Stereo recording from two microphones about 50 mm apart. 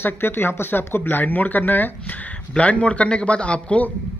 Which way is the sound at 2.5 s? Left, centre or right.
Left.